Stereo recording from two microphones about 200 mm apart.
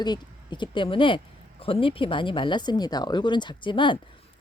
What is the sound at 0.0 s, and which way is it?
Speech, 20° left (ahead or behind).